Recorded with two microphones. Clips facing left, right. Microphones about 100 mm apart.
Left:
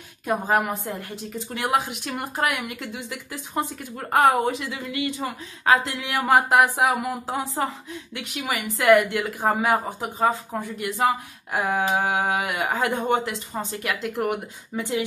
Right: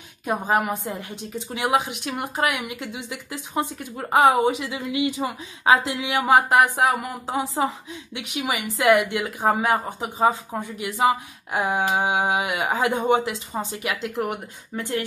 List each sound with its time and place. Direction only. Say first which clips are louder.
0.3 s speech: even; 5° right (ahead or behind)
10.1 s speech: right 2 dB; 15° right (ahead or behind)
10.8 s speech: right 2 dB; 5° right (ahead or behind)
11.8 s speech: right 1 dB; 15° right (ahead or behind)
12.6 s speech: right 2 dB; 20° right (ahead or behind)
12.9 s speech: right 2 dB; centre (ahead or behind)
14.8 s speech: left 1 dB; 15° left (ahead or behind)